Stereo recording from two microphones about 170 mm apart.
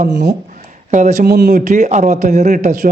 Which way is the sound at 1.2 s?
70° right (ahead or behind).